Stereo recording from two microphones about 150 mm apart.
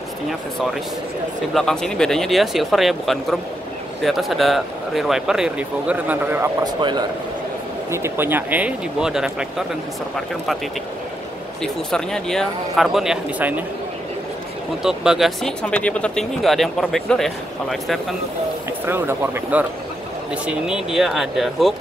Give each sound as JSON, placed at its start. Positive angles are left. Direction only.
{"t": 1.5, "sound": "speech", "side_deg": 5}
{"t": 6.6, "sound": "speech", "side_deg": -30}
{"t": 7.9, "sound": "speech", "side_deg": -15}
{"t": 11.6, "sound": "speech", "side_deg": 5}
{"t": 14.8, "sound": "speech", "side_deg": -5}
{"t": 18.9, "sound": "speech", "side_deg": -15}
{"t": 20.4, "sound": "speech", "side_deg": -5}